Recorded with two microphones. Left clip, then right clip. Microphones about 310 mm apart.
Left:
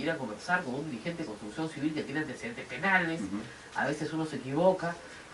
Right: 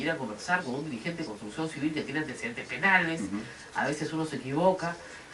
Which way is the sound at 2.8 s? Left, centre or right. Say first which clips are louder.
Right 3 dB; centre.